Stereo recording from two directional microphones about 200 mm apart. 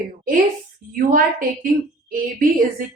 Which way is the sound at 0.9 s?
45° right (ahead or behind).